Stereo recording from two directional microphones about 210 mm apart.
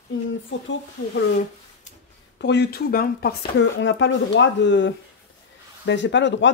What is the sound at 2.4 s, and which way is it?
Speech, 55° left (ahead or behind).